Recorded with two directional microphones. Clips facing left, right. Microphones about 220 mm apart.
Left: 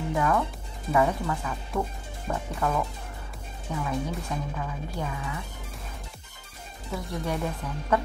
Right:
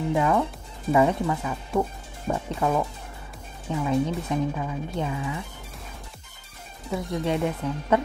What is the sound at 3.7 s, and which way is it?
Speech, 25° right (ahead or behind).